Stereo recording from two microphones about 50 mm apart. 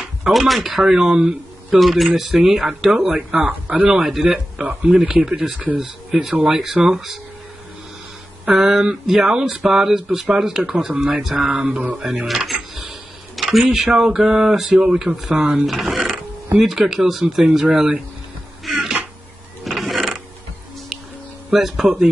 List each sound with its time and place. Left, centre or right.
0.3 s speech: centre
3.4 s speech: right
4.0 s speech: centre; by 5.8 s right
5.8 s speech: centre
8.5 s speech: centre
10.9 s speech: right
12.3 s speech: centre
15.6 s speech: centre
18.7 s music: centre
19.6 s mechanisms: centre
21.5 s speech: centre